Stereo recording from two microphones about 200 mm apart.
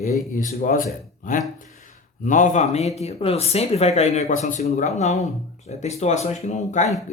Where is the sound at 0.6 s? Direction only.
45° left (ahead or behind).